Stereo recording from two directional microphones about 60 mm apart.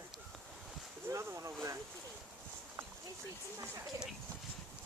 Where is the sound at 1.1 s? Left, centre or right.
Right.